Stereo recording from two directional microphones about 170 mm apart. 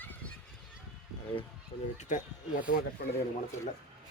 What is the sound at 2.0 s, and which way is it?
Speech, 45° left (ahead or behind).